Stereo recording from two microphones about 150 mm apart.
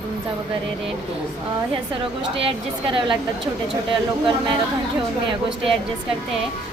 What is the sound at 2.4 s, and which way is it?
Speech, 35° right (ahead or behind).